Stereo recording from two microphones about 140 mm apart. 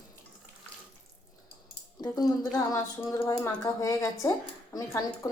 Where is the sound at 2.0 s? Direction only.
25° left (ahead or behind).